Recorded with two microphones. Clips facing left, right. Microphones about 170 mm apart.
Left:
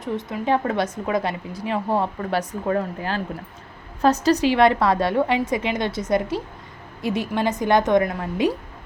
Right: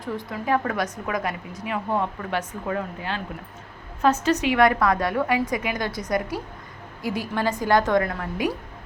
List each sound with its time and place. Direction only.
0.0 s speech: 20° left (ahead or behind)